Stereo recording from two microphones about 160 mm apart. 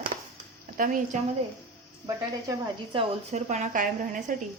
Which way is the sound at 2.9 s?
45° right (ahead or behind).